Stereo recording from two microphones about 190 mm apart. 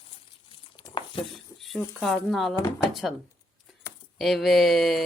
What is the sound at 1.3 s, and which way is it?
Speech, centre (ahead or behind).